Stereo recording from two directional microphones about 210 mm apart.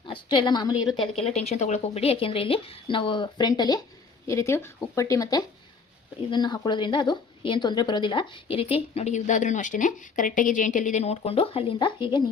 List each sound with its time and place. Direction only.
0.1 s a woman's voice: 20° left (ahead or behind)